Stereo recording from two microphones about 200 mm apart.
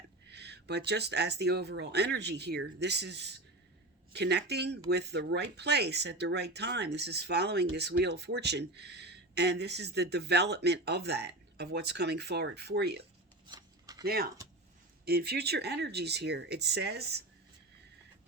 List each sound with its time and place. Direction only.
0.3 s speech: 55° right (ahead or behind)
13.5 s a sound: 20° right (ahead or behind)
14.0 s speech: 50° right (ahead or behind)